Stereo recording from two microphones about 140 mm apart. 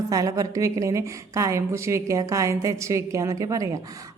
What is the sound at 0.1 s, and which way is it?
A woman's voice, 25° right (ahead or behind).